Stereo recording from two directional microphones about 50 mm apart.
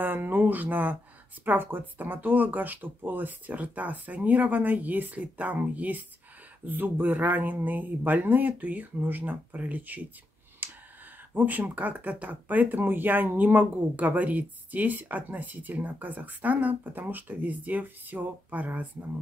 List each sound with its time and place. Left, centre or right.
0.0 s speech: right
10.6 s clicking: right
11.3 s speech: right